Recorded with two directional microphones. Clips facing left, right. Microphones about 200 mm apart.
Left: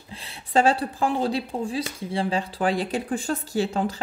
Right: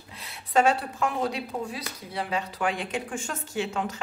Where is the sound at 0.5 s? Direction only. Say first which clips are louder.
Left 2 dB; 30° left (ahead or behind).